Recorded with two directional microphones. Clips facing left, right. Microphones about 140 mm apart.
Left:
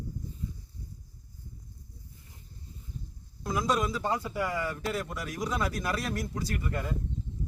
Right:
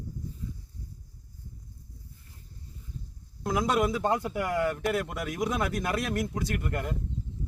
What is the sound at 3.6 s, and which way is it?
Speech, 60° right (ahead or behind).